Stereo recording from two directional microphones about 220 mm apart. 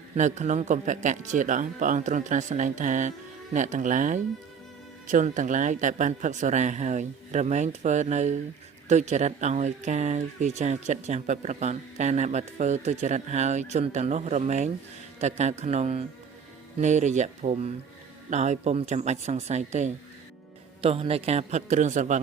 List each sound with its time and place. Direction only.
0.2 s speech: 35° right (ahead or behind)